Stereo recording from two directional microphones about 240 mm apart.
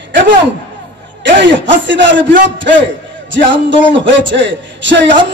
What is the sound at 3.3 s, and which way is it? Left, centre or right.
A man's voice, right.